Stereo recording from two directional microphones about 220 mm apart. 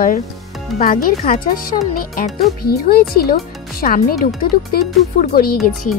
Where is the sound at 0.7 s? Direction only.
40° left (ahead or behind).